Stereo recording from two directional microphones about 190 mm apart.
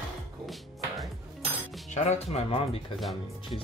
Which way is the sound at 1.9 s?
35° left (ahead or behind).